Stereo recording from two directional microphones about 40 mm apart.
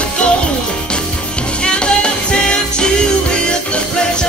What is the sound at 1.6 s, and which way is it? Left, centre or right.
Music, left.